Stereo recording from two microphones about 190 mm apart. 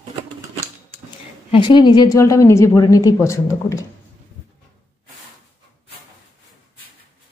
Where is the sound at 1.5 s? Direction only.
25° left (ahead or behind).